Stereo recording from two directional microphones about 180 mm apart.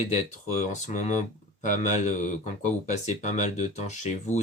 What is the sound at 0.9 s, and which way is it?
Speech, 40° left (ahead or behind).